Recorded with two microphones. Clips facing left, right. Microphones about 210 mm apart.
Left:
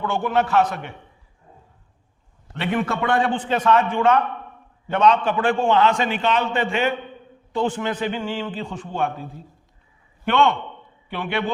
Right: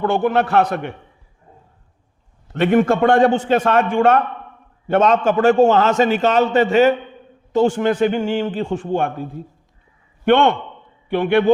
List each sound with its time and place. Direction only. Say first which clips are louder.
0.0 s a man's voice: right 5 dB; 50° right (ahead or behind)
2.6 s a man's voice: right 9 dB; 45° right (ahead or behind)
10.2 s a man's voice: right 5 dB; 55° right (ahead or behind)